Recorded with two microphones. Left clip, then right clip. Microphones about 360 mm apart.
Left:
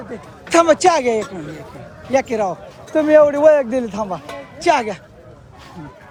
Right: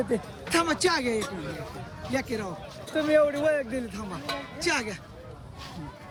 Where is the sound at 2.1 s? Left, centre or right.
Centre.